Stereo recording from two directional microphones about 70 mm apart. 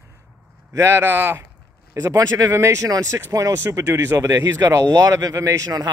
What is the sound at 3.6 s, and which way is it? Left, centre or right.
A man's voice, right.